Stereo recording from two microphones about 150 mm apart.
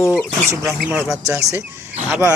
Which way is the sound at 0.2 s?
5° right (ahead or behind).